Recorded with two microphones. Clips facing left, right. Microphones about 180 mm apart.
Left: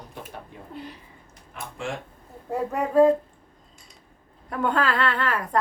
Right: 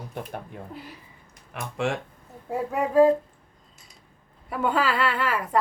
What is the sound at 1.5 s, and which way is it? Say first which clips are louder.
Speech: right 6 dB; 75° right (ahead or behind).